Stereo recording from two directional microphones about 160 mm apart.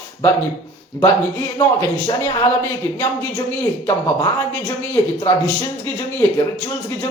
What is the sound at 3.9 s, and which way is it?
A man's voice, 15° left (ahead or behind).